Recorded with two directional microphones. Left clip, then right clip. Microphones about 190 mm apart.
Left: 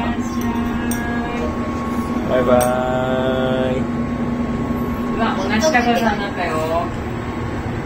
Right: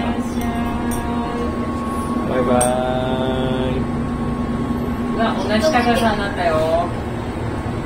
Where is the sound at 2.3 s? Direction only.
Centre (ahead or behind).